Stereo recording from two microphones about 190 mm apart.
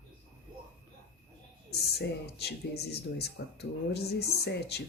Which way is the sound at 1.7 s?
60° left (ahead or behind).